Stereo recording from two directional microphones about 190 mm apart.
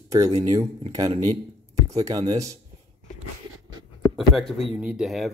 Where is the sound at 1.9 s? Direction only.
20° right (ahead or behind).